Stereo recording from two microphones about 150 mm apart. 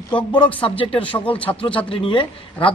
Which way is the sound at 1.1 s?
20° left (ahead or behind).